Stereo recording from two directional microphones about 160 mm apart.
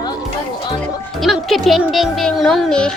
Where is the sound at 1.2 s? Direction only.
Centre (ahead or behind).